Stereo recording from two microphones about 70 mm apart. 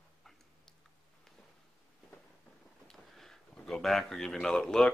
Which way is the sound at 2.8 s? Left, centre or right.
Centre.